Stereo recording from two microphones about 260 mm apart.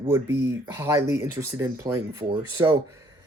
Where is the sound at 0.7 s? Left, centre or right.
Centre.